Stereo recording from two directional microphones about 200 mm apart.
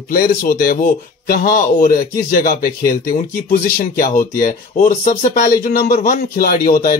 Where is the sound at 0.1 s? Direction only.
45° left (ahead or behind).